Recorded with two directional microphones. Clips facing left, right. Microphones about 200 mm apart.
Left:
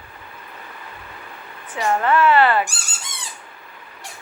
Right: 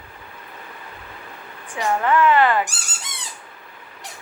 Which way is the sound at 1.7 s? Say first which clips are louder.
Left 1 dB; 15° right (ahead or behind).